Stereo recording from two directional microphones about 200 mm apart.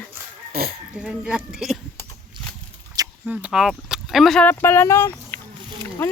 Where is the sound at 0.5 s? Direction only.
50° right (ahead or behind).